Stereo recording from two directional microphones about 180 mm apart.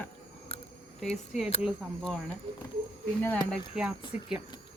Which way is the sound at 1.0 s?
Centre (ahead or behind).